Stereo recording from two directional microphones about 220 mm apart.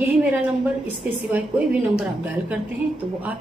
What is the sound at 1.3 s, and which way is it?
A woman's voice, 5° right (ahead or behind).